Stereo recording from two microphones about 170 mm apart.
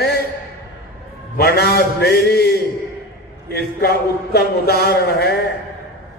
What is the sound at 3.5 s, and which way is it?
A man's voice, 70° left (ahead or behind).